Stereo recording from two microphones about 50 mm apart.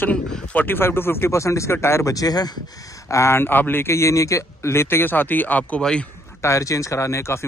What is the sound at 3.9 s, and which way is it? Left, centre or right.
Speech, left.